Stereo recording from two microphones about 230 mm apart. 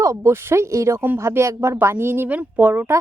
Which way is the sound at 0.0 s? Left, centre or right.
Centre.